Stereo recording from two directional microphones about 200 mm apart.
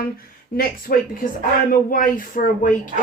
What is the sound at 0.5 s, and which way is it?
Speech, 45° left (ahead or behind).